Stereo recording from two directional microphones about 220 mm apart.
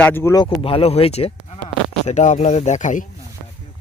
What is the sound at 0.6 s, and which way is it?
Speech, 25° left (ahead or behind).